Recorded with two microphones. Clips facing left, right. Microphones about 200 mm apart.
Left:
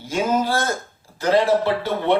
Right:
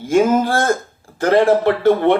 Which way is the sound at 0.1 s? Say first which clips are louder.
Right 6 dB; 50° right (ahead or behind).